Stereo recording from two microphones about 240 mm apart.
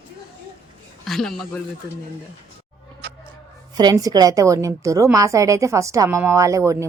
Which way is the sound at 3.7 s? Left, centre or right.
Centre.